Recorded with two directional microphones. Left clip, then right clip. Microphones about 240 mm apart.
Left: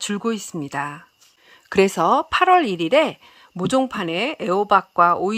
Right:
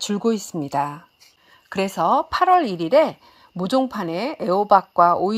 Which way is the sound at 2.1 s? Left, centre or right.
Left.